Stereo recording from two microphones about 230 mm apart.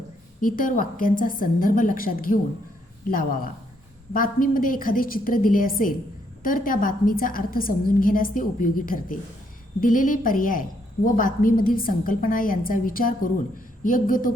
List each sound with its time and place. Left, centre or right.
0.4 s a woman's voice: left